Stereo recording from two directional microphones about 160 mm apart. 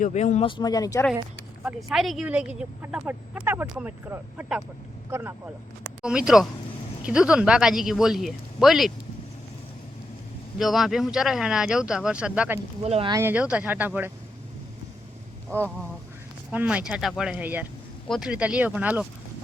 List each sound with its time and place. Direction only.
0.0 s speech: 50° left (ahead or behind)
0.4 s speech: 25° left (ahead or behind)
1.6 s speech: 5° right (ahead or behind)
6.0 s a man's voice: 5° right (ahead or behind)
10.6 s a man's voice: centre (ahead or behind)
12.8 s speech: 40° right (ahead or behind)
13.1 s speech: 15° right (ahead or behind)
16.5 s speech: 10° right (ahead or behind)